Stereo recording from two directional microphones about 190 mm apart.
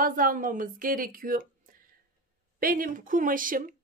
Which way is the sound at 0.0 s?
50° right (ahead or behind).